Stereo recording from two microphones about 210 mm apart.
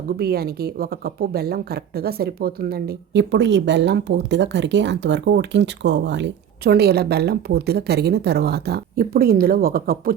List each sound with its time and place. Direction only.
0.2 s speech: 45° right (ahead or behind)